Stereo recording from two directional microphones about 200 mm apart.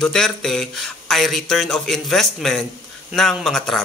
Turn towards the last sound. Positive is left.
turn(degrees=0)  # may be behind; listen again after turning